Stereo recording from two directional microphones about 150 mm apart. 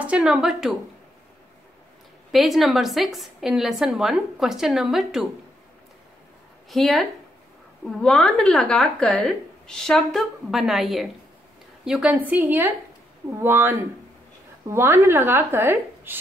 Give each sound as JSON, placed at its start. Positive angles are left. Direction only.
{"t": 0.0, "sound": "a woman's voice", "side_deg": -5}
{"t": 2.3, "sound": "a woman's voice", "side_deg": 0}
{"t": 6.7, "sound": "a woman's voice", "side_deg": 0}